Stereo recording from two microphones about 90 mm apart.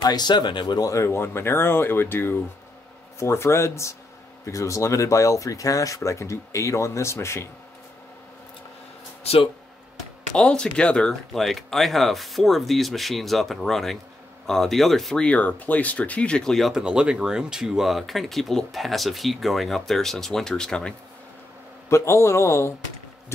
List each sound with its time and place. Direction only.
0.0 s speech: 50° left (ahead or behind)
1.0 s speech: 30° left (ahead or behind)
10.3 s speech: 10° left (ahead or behind)
16.7 s speech: 10° right (ahead or behind); by 20.9 s 10° left (ahead or behind)
21.8 s speech: 30° left (ahead or behind)